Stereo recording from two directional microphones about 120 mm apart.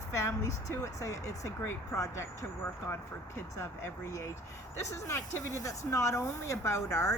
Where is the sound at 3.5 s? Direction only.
25° left (ahead or behind).